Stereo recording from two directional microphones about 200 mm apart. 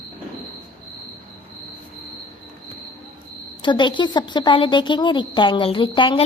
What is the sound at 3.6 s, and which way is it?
A woman's voice, 25° left (ahead or behind).